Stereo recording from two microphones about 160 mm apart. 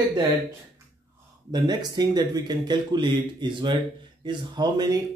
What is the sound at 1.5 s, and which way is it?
Speech, 25° right (ahead or behind).